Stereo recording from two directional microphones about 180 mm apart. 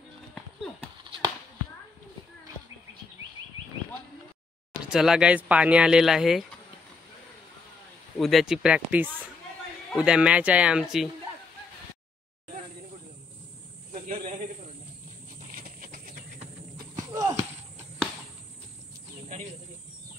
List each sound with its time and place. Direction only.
4.8 s speech: 5° right (ahead or behind)
8.2 s speech: centre (ahead or behind)
15.5 s a sound: 50° right (ahead or behind)
17.1 s horse: 20° right (ahead or behind)